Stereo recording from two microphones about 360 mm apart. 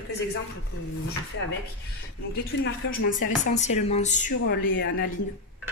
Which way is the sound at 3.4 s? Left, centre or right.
Centre.